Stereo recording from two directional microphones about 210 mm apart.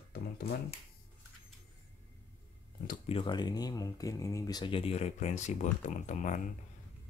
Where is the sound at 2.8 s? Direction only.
30° left (ahead or behind).